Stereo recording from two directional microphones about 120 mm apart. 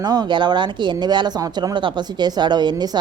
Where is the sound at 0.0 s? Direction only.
35° right (ahead or behind).